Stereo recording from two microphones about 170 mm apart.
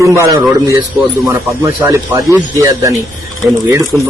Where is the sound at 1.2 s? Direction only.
20° right (ahead or behind).